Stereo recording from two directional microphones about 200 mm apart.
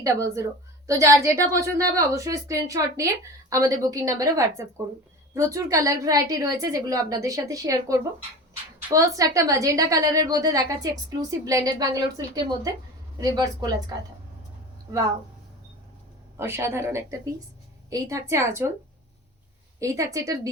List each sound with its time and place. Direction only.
0.0 s a woman's voice: 15° right (ahead or behind)
16.4 s a woman's voice: 10° right (ahead or behind)
19.8 s a woman's voice: 15° right (ahead or behind)